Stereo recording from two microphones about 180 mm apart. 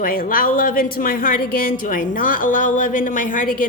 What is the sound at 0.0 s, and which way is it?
A woman's voice, 50° left (ahead or behind).